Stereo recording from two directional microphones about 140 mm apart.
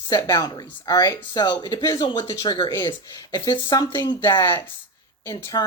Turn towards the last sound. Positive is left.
turn(degrees=25)  # may be behind; listen again after turning